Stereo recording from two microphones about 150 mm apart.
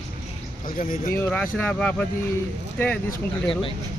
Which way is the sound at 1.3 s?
10° left (ahead or behind).